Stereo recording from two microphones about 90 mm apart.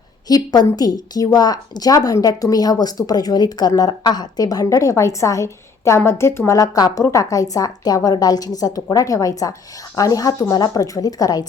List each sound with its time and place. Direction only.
0.3 s a woman's voice: 45° left (ahead or behind)